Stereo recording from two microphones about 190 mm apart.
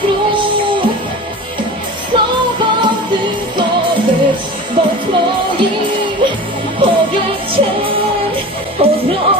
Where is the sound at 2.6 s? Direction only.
25° right (ahead or behind).